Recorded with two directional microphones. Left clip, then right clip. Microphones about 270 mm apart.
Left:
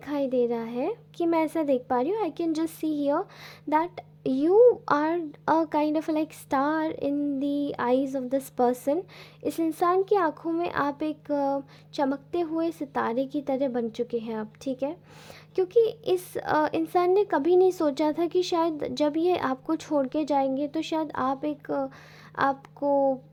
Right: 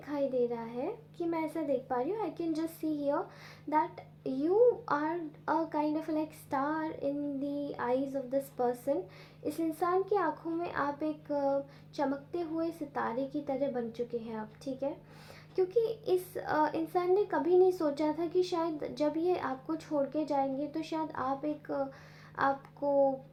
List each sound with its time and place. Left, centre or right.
0.0 s a child's voice: left